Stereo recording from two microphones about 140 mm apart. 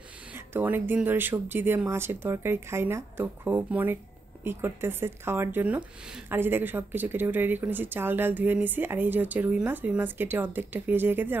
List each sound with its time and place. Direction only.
0.5 s speech: 15° right (ahead or behind)